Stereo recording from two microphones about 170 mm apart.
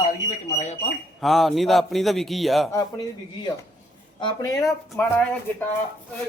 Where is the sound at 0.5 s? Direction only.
45° left (ahead or behind).